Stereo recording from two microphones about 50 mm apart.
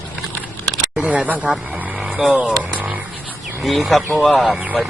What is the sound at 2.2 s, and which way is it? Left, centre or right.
Speech, right.